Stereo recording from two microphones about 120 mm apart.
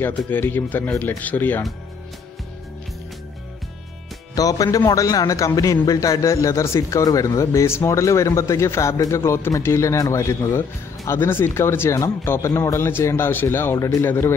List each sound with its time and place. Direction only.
0.3 s speech: 15° left (ahead or behind)
4.4 s speech: 30° left (ahead or behind)